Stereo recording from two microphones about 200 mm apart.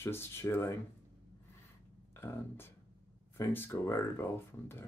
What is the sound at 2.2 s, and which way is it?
Speech, 10° left (ahead or behind).